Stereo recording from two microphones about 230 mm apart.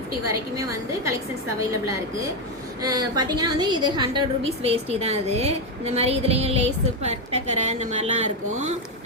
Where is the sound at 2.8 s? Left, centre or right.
Centre.